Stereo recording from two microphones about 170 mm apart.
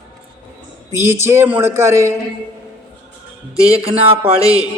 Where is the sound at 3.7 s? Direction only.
35° right (ahead or behind).